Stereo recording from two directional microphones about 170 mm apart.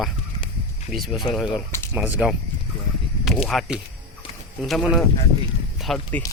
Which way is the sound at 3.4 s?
Centre (ahead or behind).